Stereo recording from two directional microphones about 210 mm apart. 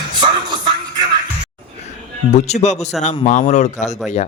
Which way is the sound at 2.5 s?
35° left (ahead or behind).